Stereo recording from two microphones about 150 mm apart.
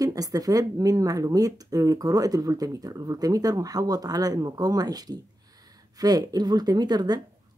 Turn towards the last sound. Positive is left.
turn(degrees=-25)  # may be behind; listen again after turning